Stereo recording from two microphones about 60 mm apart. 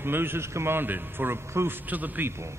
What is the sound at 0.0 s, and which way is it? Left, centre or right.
A man's voice, right.